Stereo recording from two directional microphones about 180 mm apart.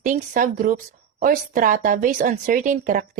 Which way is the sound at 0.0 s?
45° right (ahead or behind).